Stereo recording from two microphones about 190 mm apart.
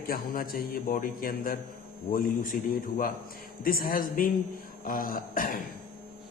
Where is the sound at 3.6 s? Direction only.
50° left (ahead or behind).